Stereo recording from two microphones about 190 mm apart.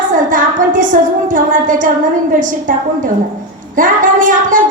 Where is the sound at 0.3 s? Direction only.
45° right (ahead or behind).